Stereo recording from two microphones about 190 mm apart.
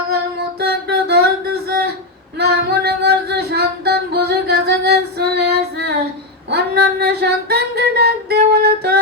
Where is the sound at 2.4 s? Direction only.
60° right (ahead or behind).